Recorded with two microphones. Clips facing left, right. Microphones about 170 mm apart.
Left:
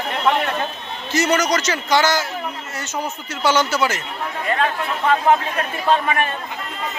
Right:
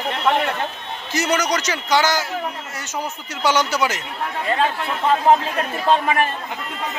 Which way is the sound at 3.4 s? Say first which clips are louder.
Left 1 dB; 15° right (ahead or behind).